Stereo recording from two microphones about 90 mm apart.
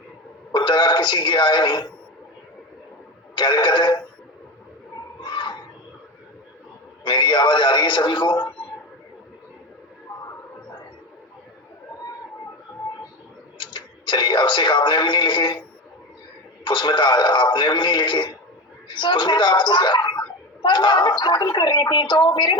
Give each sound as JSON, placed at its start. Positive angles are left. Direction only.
{"t": 0.5, "sound": "speech", "side_deg": 60}
{"t": 3.3, "sound": "speech", "side_deg": 60}
{"t": 5.2, "sound": "a sound", "side_deg": 60}
{"t": 7.0, "sound": "speech", "side_deg": 60}
{"t": 13.6, "sound": "speech", "side_deg": 60}
{"t": 16.6, "sound": "speech", "side_deg": 60}